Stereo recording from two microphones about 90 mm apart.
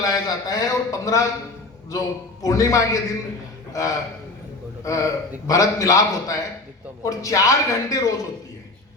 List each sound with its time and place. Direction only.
0.0 s a man's voice: 45° left (ahead or behind)